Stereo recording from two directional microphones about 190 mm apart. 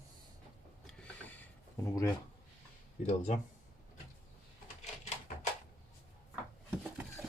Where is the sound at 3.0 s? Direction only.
35° left (ahead or behind).